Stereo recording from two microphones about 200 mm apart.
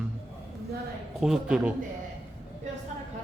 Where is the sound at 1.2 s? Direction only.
5° right (ahead or behind).